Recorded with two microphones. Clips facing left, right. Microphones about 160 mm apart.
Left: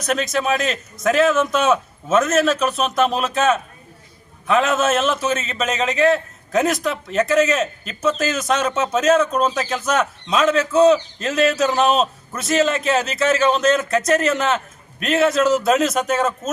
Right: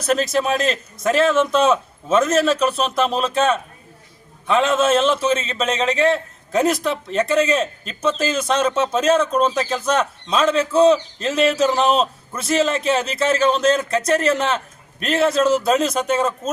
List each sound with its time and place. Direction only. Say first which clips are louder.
0.3 s a man's voice: right 1 dB; centre (ahead or behind)